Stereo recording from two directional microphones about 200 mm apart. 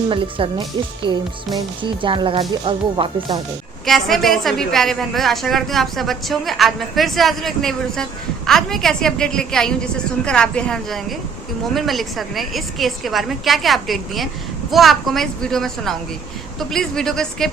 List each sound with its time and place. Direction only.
0.1 s speech: 25° right (ahead or behind)
3.8 s a woman's voice: centre (ahead or behind)